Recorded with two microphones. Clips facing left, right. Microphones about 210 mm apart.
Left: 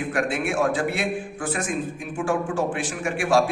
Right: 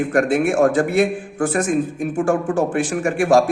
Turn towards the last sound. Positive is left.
turn(degrees=-45)  # may be behind; listen again after turning